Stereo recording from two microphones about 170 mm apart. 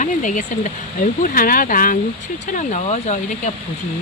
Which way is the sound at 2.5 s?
40° left (ahead or behind).